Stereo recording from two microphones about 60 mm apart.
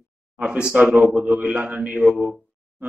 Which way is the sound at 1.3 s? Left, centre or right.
Right.